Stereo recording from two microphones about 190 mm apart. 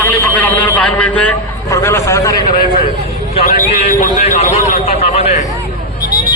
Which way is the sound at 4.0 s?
40° left (ahead or behind).